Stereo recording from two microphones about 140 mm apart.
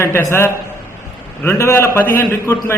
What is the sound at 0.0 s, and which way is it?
A man's voice, 20° left (ahead or behind).